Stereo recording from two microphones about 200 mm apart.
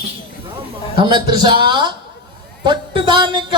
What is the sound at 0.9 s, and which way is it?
Speech, 20° right (ahead or behind).